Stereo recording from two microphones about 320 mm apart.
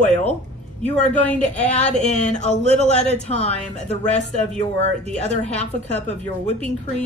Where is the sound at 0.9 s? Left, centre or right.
Centre.